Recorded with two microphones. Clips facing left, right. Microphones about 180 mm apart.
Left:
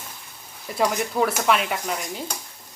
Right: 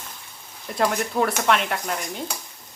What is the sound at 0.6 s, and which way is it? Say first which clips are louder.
Speech: even; centre (ahead or behind).